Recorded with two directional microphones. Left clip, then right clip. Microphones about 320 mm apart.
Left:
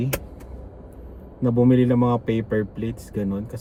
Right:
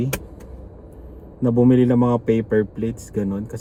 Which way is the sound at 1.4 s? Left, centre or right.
Centre.